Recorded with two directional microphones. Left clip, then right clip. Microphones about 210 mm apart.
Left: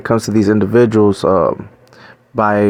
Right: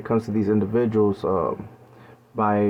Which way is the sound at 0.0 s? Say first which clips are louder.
Left 9 dB; 35° left (ahead or behind).